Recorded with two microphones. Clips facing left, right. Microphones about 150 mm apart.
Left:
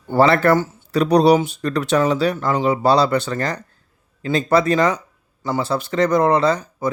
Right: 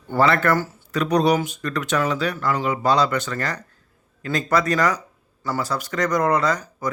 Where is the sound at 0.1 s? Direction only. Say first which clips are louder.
Left 4 dB; 30° left (ahead or behind).